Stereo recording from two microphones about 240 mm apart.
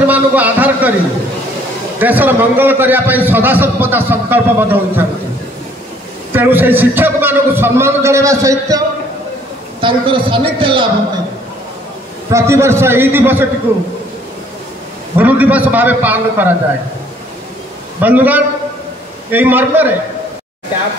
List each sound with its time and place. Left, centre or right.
0.0 s a man's voice: centre
2.0 s a man's voice: centre
6.3 s a man's voice: centre
12.3 s a man's voice: centre
15.1 s a man's voice: centre
18.0 s a man's voice: centre